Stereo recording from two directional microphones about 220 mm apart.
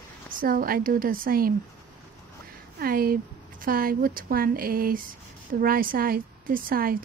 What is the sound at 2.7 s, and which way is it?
A woman's voice, 40° right (ahead or behind).